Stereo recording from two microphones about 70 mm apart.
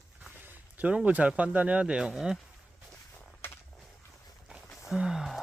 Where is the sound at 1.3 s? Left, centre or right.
Centre.